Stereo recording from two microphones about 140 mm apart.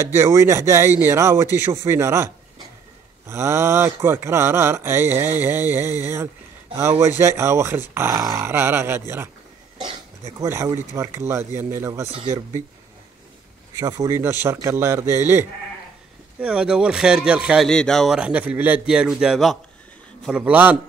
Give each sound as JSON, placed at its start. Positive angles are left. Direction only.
{"t": 0.0, "sound": "speech", "side_deg": -20}
{"t": 13.7, "sound": "speech", "side_deg": -25}
{"t": 17.6, "sound": "a man's voice", "side_deg": 5}